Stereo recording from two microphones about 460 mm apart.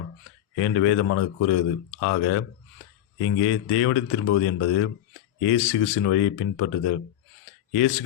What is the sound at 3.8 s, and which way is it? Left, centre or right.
Speech, left.